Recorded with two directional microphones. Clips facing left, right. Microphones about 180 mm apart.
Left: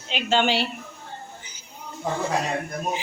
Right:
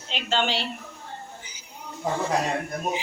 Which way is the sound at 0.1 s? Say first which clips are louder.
Left 4 dB; 5° left (ahead or behind).